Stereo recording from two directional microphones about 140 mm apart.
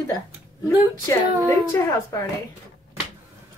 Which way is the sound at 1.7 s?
20° left (ahead or behind).